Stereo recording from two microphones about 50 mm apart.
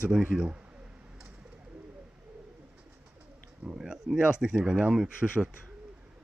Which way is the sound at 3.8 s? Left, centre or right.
Centre.